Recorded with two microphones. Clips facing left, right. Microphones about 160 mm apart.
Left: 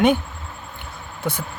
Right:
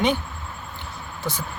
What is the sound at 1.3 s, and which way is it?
Speech, 55° left (ahead or behind).